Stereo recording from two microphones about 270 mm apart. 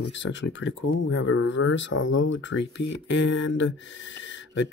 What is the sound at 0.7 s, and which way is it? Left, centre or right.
Speech, left.